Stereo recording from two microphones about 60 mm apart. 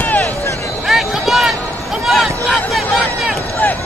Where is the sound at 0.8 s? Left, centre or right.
Centre.